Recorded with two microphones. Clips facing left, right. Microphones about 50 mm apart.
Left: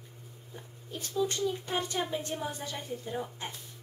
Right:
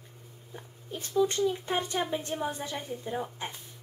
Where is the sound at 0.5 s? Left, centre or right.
Centre.